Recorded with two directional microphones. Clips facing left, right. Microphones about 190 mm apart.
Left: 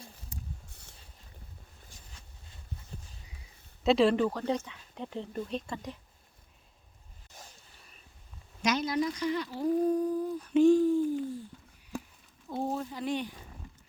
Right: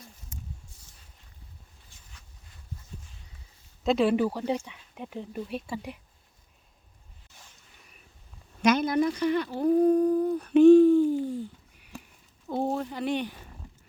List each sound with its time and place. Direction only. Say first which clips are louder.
0.3 s snake: even; 35° left (ahead or behind)
0.7 s a sound: left 2 dB; 60° left (ahead or behind)
1.9 s a sound: left 5 dB; 40° left (ahead or behind)
3.8 s speech: right 1 dB; centre (ahead or behind)
8.6 s speech: right 6 dB; 55° right (ahead or behind)
12.5 s speech: right 5 dB; 70° right (ahead or behind)